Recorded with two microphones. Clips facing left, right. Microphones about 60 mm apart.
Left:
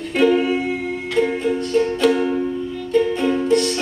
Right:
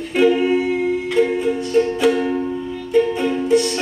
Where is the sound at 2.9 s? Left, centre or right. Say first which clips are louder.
Right 1 dB; centre.